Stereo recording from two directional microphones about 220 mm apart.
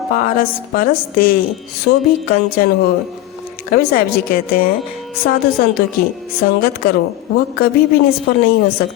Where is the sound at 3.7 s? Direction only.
40° left (ahead or behind).